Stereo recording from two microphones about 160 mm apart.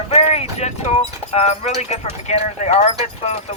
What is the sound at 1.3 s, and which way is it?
Speech, 45° left (ahead or behind).